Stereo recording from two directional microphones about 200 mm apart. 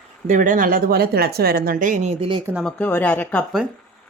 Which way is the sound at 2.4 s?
5° right (ahead or behind).